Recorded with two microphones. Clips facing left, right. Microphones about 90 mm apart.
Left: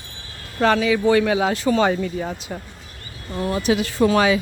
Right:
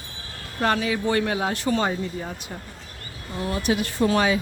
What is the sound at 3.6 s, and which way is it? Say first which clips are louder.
Speech: left 4 dB; 90° left.